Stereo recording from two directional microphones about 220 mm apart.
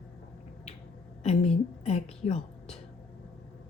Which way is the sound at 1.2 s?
30° left (ahead or behind).